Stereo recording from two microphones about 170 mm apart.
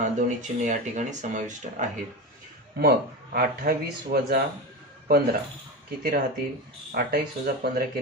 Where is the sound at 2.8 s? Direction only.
70° right (ahead or behind).